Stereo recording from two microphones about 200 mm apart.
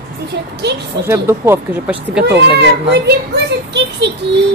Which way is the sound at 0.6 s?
55° right (ahead or behind).